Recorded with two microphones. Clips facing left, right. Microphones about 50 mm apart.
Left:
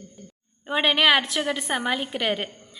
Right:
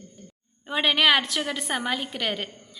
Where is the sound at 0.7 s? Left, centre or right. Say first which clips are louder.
Left 1 dB; centre.